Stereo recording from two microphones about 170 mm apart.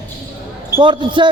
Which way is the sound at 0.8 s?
25° right (ahead or behind).